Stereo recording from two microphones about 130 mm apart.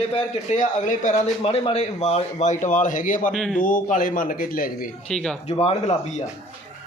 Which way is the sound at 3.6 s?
90° left.